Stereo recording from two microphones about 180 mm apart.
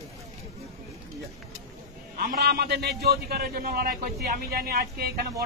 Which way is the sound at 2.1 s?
60° right (ahead or behind).